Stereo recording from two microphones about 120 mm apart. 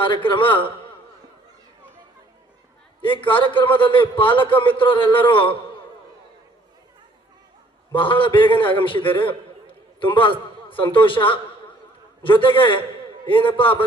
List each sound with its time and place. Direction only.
0.0 s a man's voice: 45° left (ahead or behind)
3.0 s a man's voice: 45° left (ahead or behind)
7.9 s a man's voice: 45° left (ahead or behind)